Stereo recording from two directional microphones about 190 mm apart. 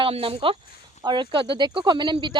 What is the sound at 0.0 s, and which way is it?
Speech, 30° right (ahead or behind).